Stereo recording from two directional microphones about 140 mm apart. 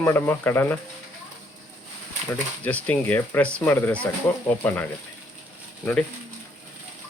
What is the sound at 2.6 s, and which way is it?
Speech, 10° left (ahead or behind).